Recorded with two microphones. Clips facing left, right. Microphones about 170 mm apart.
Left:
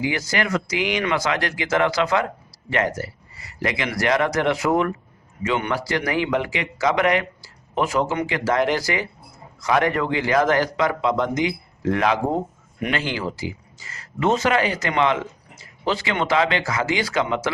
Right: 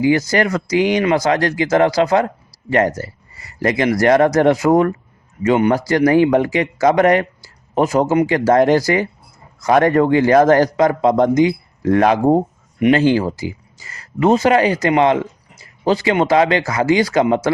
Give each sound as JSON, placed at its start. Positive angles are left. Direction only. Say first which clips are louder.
{"t": 0.0, "sound": "speech", "louder": "right 9 dB", "side_deg": -40}